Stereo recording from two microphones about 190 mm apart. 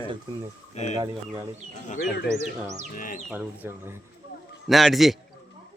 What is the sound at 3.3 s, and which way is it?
Speech, 10° right (ahead or behind).